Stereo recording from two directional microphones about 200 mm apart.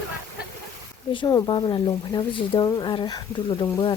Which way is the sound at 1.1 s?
25° left (ahead or behind).